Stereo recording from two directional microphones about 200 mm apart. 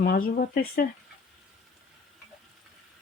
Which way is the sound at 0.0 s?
50° left (ahead or behind).